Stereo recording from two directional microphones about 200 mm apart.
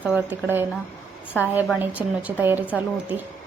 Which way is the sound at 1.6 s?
5° right (ahead or behind).